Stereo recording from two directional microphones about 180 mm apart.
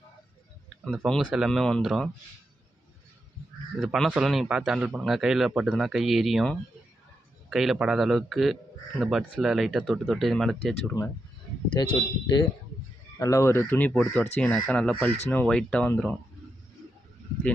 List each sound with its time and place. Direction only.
0.8 s speech: centre (ahead or behind)
3.8 s speech: centre (ahead or behind)
11.7 s speech: 25° left (ahead or behind); by 16.2 s 5° left (ahead or behind)